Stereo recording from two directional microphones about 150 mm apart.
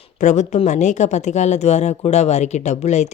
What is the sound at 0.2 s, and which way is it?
Speech, 55° left (ahead or behind).